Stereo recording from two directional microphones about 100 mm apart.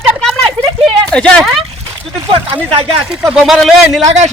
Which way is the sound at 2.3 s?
65° right (ahead or behind).